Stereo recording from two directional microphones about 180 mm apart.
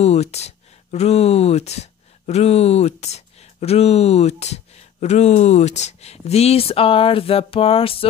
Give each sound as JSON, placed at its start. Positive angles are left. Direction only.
{"t": 0.0, "sound": "speech", "side_deg": 35}